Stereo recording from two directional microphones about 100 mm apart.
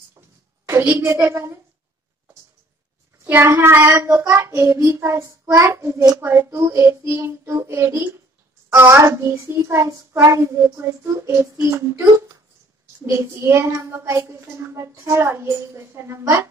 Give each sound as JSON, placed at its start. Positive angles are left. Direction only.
{"t": 0.7, "sound": "a child's voice", "side_deg": -25}
{"t": 3.3, "sound": "a child's voice", "side_deg": -20}